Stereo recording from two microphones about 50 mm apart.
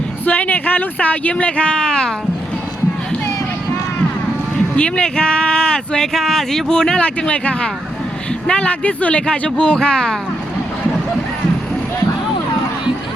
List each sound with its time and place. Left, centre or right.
0.3 s speech: left; by 2.1 s centre
4.8 s speech: centre
7.0 s speech: left